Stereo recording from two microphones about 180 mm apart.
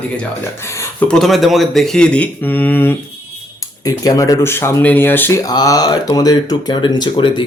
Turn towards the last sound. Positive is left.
turn(degrees=25)  # may be behind; listen again after turning